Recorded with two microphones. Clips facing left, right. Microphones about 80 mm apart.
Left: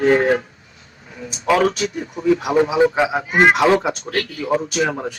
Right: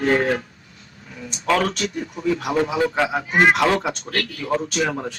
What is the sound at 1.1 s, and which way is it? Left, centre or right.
Speech, centre.